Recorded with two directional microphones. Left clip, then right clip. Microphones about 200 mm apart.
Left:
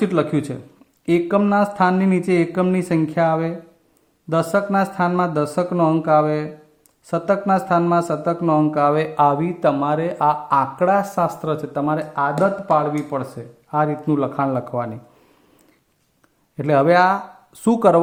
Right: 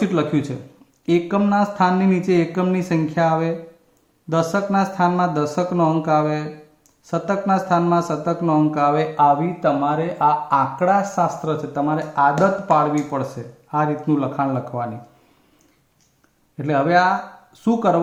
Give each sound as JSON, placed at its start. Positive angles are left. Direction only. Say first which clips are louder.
{"t": 0.0, "sound": "speech", "louder": "left 1 dB", "side_deg": 35}
{"t": 16.6, "sound": "speech", "louder": "left 2 dB", "side_deg": 45}